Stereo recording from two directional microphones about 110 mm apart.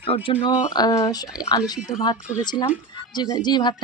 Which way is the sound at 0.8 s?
30° left (ahead or behind).